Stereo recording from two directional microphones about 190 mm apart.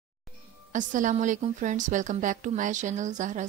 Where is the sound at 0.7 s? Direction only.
40° right (ahead or behind).